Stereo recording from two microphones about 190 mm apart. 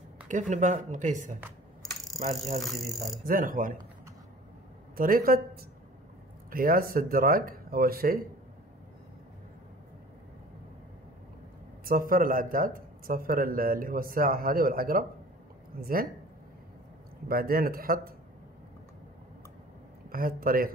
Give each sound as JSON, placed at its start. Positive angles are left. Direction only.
{"t": 0.3, "sound": "speech", "side_deg": -40}
{"t": 2.1, "sound": "a sound", "side_deg": 0}
{"t": 3.3, "sound": "speech", "side_deg": -45}
{"t": 4.9, "sound": "speech", "side_deg": -50}
{"t": 11.8, "sound": "speech", "side_deg": -50}
{"t": 17.3, "sound": "speech", "side_deg": -50}
{"t": 20.1, "sound": "speech", "side_deg": -50}